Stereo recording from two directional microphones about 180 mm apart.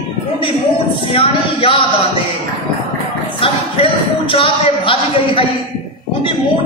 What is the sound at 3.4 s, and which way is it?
A woman's voice, 30° left (ahead or behind).